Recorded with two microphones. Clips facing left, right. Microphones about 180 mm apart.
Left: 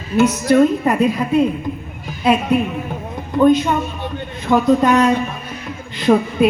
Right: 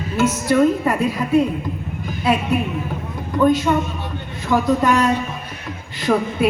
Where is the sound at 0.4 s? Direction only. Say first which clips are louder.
Left 1 dB; 20° left (ahead or behind).